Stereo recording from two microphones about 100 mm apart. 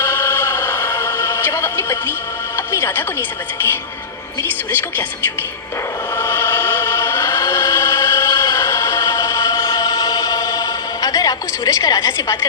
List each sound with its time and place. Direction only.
0.0 s music: 25° left (ahead or behind)
4.7 s speech: 20° left (ahead or behind)
6.1 s chant: 20° left (ahead or behind)
10.7 s a sound: 35° left (ahead or behind)